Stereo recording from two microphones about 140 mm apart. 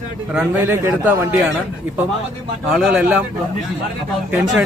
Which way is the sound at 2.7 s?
5° right (ahead or behind).